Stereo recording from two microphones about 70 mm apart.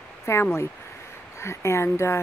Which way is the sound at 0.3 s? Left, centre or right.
Left.